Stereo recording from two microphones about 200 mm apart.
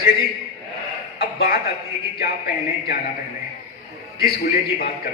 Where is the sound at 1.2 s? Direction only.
50° left (ahead or behind).